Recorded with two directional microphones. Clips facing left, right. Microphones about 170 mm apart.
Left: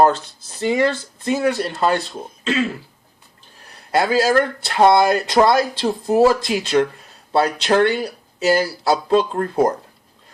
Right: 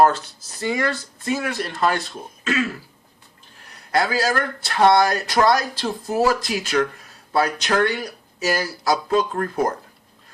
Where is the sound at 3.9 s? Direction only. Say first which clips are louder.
Left 4 dB; 25° left (ahead or behind).